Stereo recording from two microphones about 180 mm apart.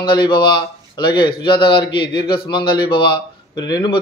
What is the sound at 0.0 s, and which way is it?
Speech, 25° left (ahead or behind).